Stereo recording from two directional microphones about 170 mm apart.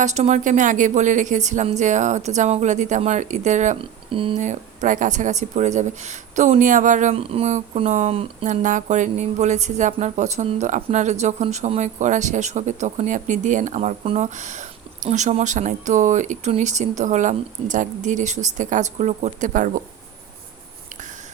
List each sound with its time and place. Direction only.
0.0 s speech: 45° right (ahead or behind)
3.8 s speech: 30° right (ahead or behind)
4.4 s speech: 45° right (ahead or behind)
8.6 s speech: 50° right (ahead or behind)